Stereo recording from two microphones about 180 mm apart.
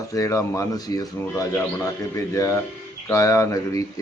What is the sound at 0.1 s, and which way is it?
Speech, 20° left (ahead or behind).